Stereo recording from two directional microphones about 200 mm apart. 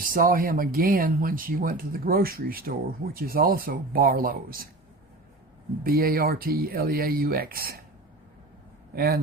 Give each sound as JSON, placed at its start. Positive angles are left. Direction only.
{"t": 0.0, "sound": "speech", "side_deg": -45}
{"t": 5.8, "sound": "speech", "side_deg": -50}
{"t": 9.0, "sound": "speech", "side_deg": -50}